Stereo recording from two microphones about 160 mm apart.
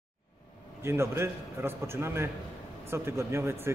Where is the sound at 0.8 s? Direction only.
15° right (ahead or behind).